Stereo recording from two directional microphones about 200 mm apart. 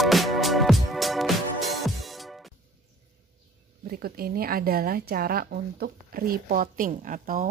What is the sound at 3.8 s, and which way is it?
A woman's voice, 50° right (ahead or behind).